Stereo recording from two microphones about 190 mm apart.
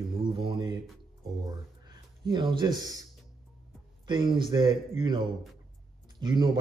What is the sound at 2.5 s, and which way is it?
Speech, 20° right (ahead or behind).